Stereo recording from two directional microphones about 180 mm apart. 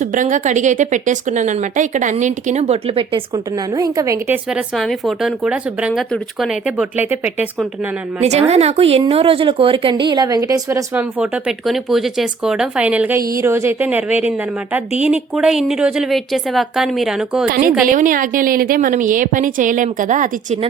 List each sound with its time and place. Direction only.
0.0 s speech: 45° right (ahead or behind); by 4.4 s 15° right (ahead or behind)
4.5 s speech: centre (ahead or behind)
8.2 s speech: 35° right (ahead or behind); by 17.5 s 5° right (ahead or behind)
17.9 s speech: 45° right (ahead or behind)